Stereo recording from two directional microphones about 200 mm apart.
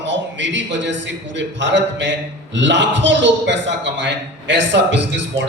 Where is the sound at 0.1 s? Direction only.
65° right (ahead or behind).